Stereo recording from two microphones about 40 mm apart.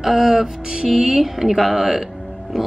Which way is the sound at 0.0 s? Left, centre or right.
Centre.